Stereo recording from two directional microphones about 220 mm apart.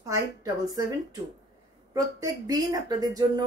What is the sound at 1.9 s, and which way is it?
Speech, 15° right (ahead or behind).